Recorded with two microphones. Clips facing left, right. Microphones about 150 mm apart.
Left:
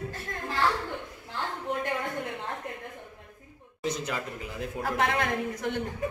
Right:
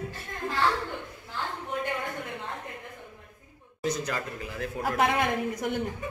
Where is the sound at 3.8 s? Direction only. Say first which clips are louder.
Right 1 dB; 25° left (ahead or behind).